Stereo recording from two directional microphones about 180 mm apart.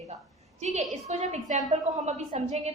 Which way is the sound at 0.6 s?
40° right (ahead or behind).